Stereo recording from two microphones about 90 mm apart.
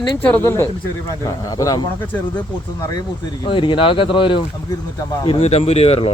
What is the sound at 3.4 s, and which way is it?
Speech, 65° left (ahead or behind).